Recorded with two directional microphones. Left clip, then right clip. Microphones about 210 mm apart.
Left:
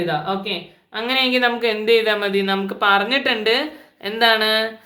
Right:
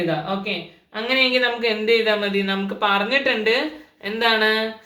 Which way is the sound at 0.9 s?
55° left (ahead or behind).